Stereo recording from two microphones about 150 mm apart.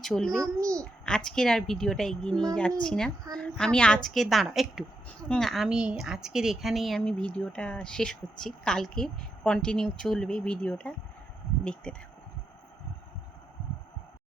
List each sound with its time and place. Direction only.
0.0 s speech: 5° left (ahead or behind)
0.4 s a child's voice: 20° right (ahead or behind)
1.0 s speech: 5° left (ahead or behind)